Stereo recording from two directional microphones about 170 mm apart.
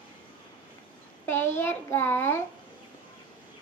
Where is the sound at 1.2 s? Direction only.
15° left (ahead or behind).